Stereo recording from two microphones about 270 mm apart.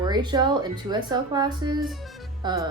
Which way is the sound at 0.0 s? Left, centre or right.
Centre.